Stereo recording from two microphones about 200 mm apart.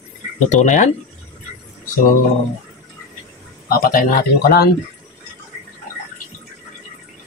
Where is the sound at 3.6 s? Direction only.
45° left (ahead or behind).